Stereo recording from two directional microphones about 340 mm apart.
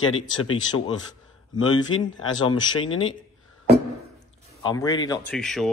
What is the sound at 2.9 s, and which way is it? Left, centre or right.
Speech, left.